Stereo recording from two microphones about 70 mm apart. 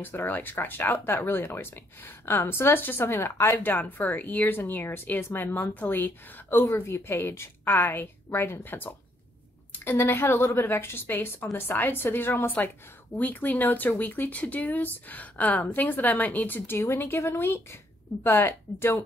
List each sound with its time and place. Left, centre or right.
0.0 s speech: left
6.6 s a woman's voice: left